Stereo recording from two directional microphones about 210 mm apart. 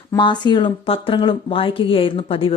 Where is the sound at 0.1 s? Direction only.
20° left (ahead or behind).